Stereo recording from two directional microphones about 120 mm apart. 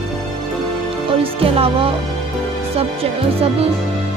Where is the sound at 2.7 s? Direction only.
55° right (ahead or behind).